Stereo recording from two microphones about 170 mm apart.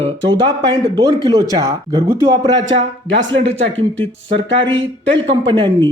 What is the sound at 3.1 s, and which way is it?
Speech, 90° right.